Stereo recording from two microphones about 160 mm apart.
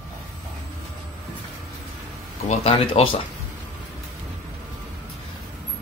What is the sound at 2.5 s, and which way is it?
Speech, 35° left (ahead or behind).